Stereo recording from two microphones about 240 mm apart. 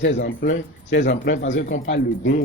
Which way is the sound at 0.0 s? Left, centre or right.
Left.